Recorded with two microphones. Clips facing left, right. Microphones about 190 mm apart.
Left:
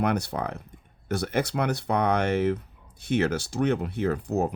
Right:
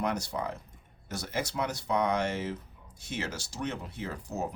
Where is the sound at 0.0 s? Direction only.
60° left (ahead or behind).